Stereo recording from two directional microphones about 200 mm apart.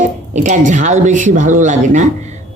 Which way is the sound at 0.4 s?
40° right (ahead or behind).